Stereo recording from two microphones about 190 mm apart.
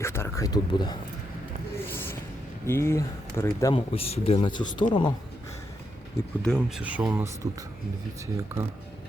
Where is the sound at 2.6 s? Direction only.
15° left (ahead or behind).